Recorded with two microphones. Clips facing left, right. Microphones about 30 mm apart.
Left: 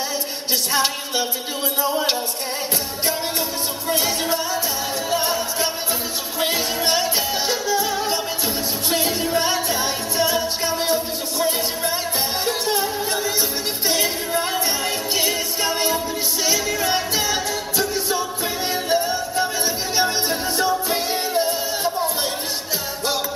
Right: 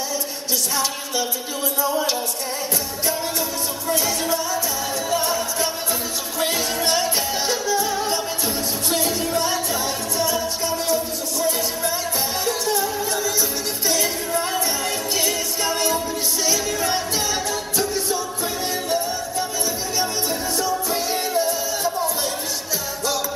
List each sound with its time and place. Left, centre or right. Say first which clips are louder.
1.8 s speech: left 1 dB; left
3.9 s music: left 1 dB; left; by 8.2 s centre
8.9 s music: left 2 dB; left
18.9 s music: left 3 dB; left